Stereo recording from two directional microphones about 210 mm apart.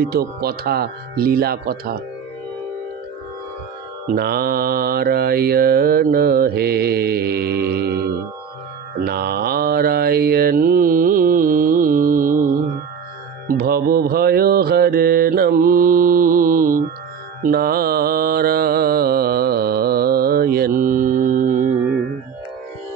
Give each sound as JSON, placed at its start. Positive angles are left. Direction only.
{"t": 0.0, "sound": "mantra", "side_deg": -45}
{"t": 4.1, "sound": "mantra", "side_deg": -45}
{"t": 9.0, "sound": "mantra", "side_deg": -50}